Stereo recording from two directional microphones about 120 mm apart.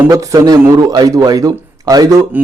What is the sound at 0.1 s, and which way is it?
Speech, 30° right (ahead or behind).